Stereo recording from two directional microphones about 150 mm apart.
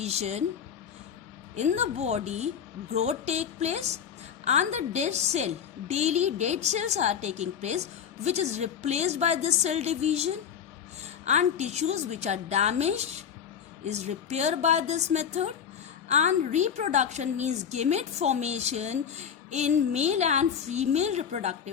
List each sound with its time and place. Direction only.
0.0 s speech: 45° right (ahead or behind)
1.5 s a woman's voice: 50° right (ahead or behind)